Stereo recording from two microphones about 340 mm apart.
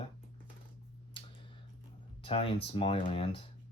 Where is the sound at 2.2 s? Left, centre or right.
Centre.